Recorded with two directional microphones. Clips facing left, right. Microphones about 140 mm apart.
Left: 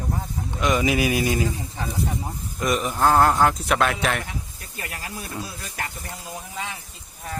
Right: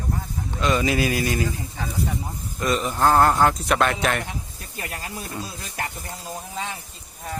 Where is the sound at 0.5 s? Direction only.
15° left (ahead or behind).